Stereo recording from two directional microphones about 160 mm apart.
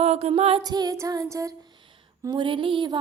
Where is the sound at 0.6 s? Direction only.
25° right (ahead or behind).